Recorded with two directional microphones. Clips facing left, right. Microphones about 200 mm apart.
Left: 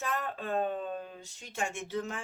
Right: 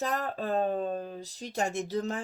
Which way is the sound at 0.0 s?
40° right (ahead or behind).